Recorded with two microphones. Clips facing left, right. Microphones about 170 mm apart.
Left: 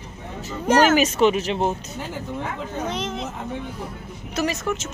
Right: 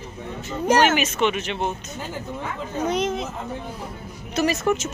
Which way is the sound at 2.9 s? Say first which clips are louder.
Right 4 dB; 15° right (ahead or behind).